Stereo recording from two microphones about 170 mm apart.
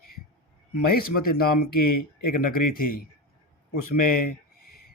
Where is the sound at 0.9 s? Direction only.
60° left (ahead or behind).